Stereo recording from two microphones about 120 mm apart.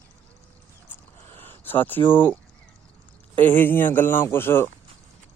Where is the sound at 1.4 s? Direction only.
15° left (ahead or behind).